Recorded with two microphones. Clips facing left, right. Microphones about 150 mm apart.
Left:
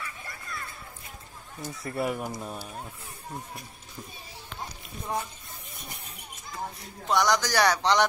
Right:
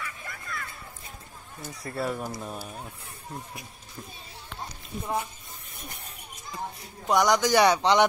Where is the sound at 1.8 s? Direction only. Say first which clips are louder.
Left 1 dB; 20° left (ahead or behind).